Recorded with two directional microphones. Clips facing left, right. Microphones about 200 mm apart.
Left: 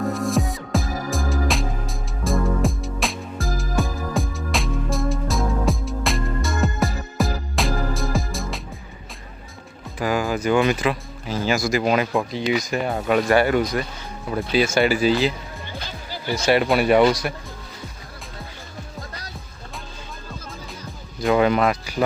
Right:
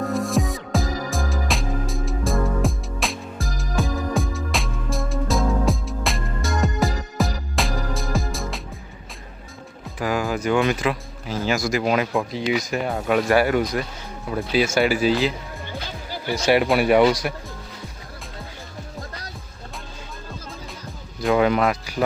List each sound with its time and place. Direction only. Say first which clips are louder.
0.0 s music: even; centre (ahead or behind)
10.0 s speech: left 1 dB; centre (ahead or behind)
15.6 s music: right 2 dB; 55° right (ahead or behind)
16.7 s speech: left 1 dB; 10° right (ahead or behind)
21.2 s speech: left 1 dB; centre (ahead or behind)